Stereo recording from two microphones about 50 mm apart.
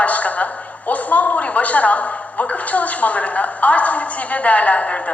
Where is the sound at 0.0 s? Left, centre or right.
Left.